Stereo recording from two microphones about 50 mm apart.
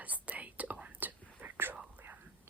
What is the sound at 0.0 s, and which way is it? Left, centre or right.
Whispering, right.